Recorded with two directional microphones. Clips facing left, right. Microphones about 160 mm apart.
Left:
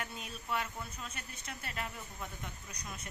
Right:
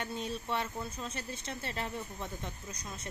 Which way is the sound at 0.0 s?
30° right (ahead or behind).